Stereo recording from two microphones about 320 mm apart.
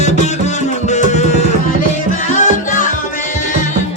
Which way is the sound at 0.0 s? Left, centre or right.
Left.